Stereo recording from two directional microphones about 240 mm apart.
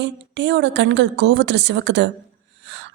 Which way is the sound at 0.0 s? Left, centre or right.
Right.